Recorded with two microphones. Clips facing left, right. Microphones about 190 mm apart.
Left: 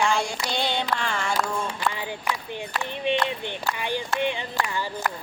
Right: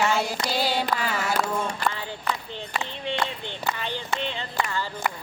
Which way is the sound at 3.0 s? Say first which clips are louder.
Left 6 dB; 15° left (ahead or behind).